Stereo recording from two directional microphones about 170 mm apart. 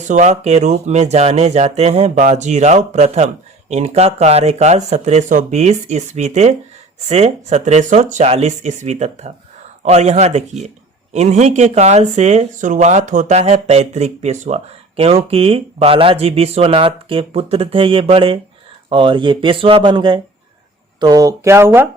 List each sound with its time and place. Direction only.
0.1 s speech: 45° right (ahead or behind); by 21.8 s 15° right (ahead or behind)